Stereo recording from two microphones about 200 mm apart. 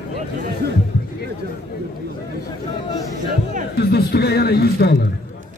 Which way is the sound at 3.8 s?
55° left (ahead or behind).